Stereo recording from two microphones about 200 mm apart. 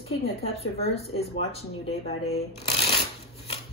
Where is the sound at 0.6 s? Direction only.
30° left (ahead or behind).